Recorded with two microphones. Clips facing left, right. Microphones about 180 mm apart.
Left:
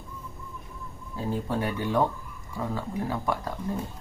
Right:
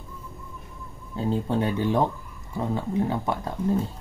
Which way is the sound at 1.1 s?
25° right (ahead or behind).